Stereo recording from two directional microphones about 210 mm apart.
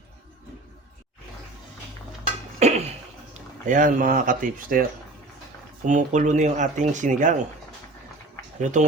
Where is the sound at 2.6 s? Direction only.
30° right (ahead or behind).